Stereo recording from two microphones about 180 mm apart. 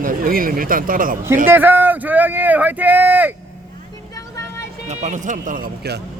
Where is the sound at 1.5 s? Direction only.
10° right (ahead or behind).